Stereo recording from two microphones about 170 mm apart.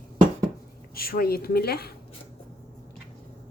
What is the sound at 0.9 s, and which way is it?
Speech, 60° left (ahead or behind).